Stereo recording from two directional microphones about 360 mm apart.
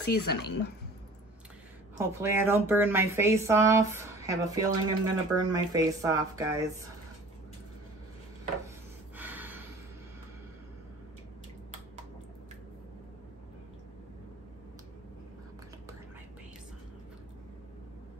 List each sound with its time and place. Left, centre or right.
0.0 s speech: left
2.0 s speech: centre
8.6 s a sound: centre